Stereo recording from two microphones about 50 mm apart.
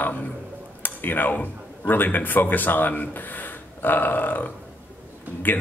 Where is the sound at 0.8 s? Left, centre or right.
Left.